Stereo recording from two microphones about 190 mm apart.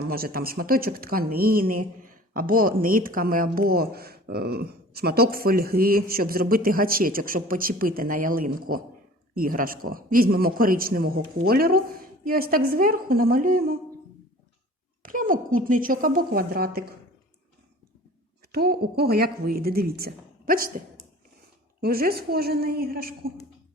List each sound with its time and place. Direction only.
0.1 s a woman's voice: 50° right (ahead or behind)
15.0 s a woman's voice: 45° right (ahead or behind)
18.5 s a woman's voice: 55° right (ahead or behind)